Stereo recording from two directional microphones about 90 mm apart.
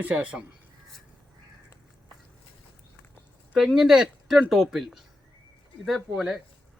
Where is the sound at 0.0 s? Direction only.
15° right (ahead or behind).